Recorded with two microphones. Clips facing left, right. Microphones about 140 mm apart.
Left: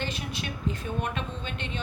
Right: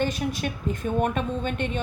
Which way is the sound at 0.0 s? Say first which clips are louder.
Right 8 dB; 45° right (ahead or behind).